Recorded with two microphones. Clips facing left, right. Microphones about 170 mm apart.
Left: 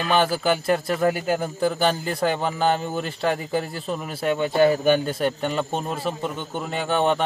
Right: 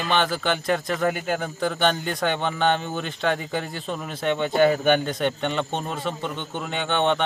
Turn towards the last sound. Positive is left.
turn(degrees=5)  # may be behind; listen again after turning